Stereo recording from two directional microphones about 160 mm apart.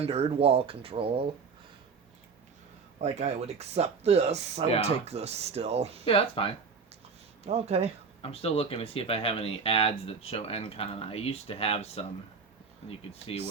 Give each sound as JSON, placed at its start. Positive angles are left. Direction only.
{"t": 0.0, "sound": "speech", "side_deg": -40}
{"t": 3.0, "sound": "speech", "side_deg": -40}
{"t": 6.1, "sound": "speech", "side_deg": 35}
{"t": 7.4, "sound": "speech", "side_deg": -40}
{"t": 8.2, "sound": "speech", "side_deg": 35}